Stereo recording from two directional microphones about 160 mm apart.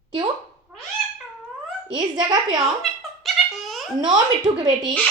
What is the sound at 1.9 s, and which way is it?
Speech, 25° right (ahead or behind).